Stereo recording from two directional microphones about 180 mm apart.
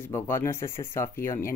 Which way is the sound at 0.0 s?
15° left (ahead or behind).